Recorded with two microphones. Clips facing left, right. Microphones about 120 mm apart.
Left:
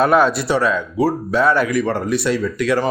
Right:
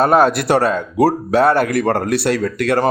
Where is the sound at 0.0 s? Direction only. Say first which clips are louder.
Right 2 dB; 40° right (ahead or behind).